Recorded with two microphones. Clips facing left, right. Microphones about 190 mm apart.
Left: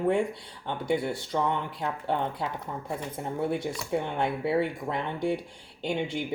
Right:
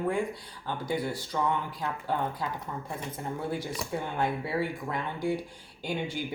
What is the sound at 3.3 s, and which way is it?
Speech, 25° left (ahead or behind).